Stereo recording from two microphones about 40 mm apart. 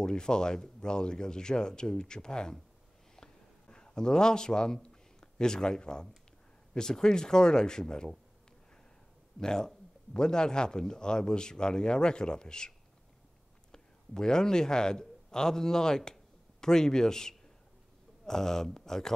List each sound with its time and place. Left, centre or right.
0.0 s speech: centre
3.2 s a sound: centre
6.7 s speech: centre
9.4 s speech: centre